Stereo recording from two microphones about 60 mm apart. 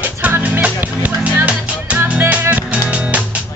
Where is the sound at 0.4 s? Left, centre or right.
Right.